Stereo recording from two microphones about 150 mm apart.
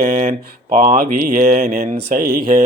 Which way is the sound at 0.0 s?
75° right (ahead or behind).